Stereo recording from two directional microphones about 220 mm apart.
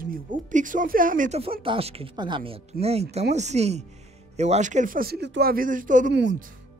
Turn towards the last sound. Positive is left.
turn(degrees=-55)  # may be behind; listen again after turning